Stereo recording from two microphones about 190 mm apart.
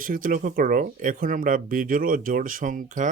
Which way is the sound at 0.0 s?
45° right (ahead or behind).